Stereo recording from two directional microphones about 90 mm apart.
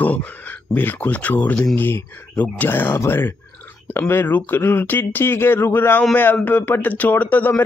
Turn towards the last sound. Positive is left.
turn(degrees=20)  # may be behind; listen again after turning